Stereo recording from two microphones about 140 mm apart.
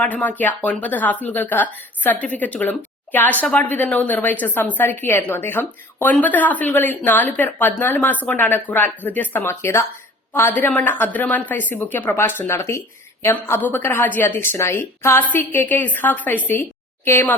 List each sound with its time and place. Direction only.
0.0 s a woman's voice: 10° left (ahead or behind)